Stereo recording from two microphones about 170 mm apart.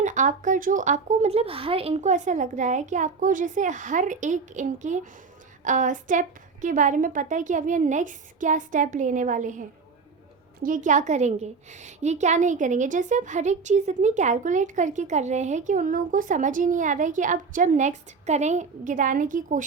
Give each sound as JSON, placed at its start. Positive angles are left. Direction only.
{"t": 0.0, "sound": "a woman's voice", "side_deg": -45}